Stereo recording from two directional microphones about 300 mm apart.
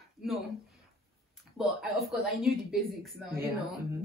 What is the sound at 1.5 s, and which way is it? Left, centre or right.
A woman's voice, centre.